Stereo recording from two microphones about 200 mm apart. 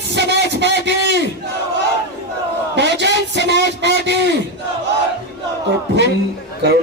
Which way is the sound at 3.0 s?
60° right (ahead or behind).